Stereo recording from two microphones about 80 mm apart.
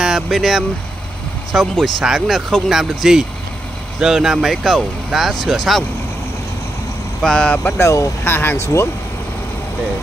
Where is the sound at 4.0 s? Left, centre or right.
Centre.